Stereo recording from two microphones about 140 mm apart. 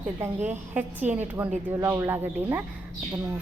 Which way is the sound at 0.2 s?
15° right (ahead or behind).